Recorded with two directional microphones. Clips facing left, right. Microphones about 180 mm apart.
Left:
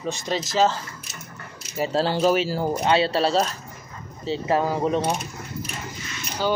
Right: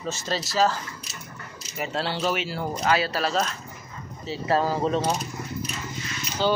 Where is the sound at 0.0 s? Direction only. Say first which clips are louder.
Left 3 dB; 15° left (ahead or behind).